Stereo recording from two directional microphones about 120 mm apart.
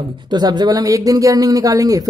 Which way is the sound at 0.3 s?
35° right (ahead or behind).